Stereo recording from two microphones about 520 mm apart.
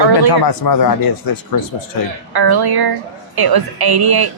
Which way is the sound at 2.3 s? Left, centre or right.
Right.